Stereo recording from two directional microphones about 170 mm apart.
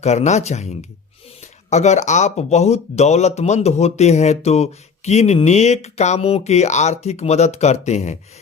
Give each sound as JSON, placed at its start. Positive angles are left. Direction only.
{"t": 0.0, "sound": "speech", "side_deg": 40}